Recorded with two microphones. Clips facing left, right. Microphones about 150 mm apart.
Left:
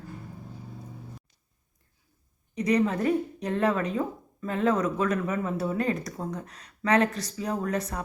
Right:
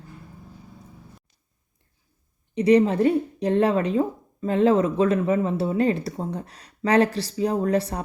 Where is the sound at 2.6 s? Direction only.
30° right (ahead or behind).